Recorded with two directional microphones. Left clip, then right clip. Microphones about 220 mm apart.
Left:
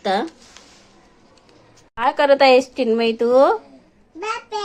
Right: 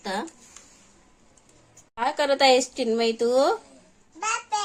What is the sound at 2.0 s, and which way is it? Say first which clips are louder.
Speech: left 7 dB; centre (ahead or behind).